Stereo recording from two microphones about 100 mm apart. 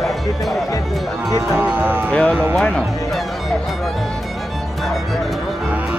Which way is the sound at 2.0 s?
10° left (ahead or behind).